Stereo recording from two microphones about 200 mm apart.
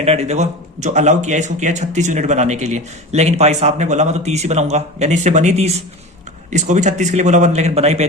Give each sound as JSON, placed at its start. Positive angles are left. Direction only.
{"t": 0.0, "sound": "speech", "side_deg": -30}